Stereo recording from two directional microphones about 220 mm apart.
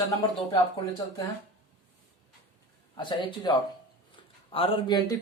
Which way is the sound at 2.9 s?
20° left (ahead or behind).